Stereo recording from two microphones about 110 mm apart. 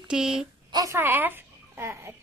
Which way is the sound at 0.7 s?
30° right (ahead or behind).